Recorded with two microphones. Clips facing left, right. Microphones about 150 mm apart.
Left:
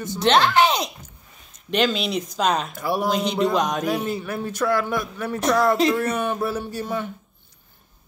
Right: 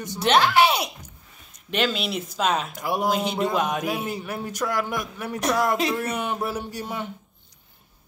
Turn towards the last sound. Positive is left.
turn(degrees=-15)  # may be behind; listen again after turning